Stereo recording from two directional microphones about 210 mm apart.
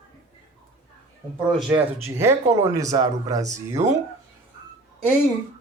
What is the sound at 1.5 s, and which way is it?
Speech, 5° right (ahead or behind).